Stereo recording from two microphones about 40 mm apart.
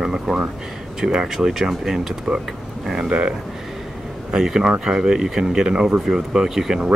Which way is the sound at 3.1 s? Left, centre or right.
Right.